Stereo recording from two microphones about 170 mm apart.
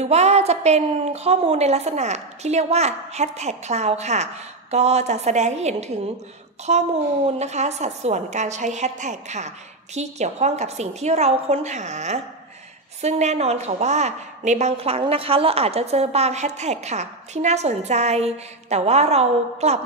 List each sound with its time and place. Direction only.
0.0 s a woman's voice: 40° right (ahead or behind)